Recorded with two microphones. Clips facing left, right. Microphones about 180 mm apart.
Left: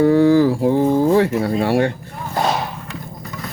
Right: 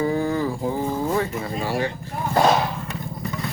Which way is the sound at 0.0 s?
75° left (ahead or behind).